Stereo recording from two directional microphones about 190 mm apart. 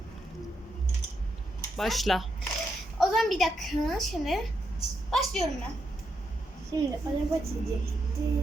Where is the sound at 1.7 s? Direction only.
Centre (ahead or behind).